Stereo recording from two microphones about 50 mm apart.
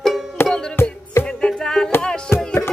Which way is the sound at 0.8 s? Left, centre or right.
Left.